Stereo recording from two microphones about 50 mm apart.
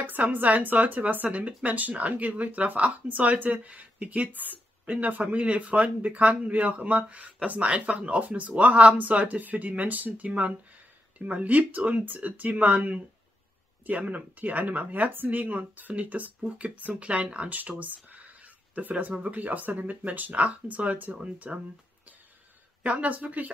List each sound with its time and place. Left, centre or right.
0.0 s speech: right
21.5 s speech: centre
22.8 s speech: right